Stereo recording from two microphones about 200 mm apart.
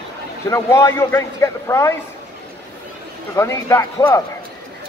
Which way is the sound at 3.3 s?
15° left (ahead or behind).